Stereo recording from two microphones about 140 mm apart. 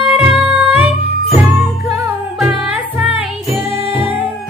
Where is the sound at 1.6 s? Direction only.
20° right (ahead or behind).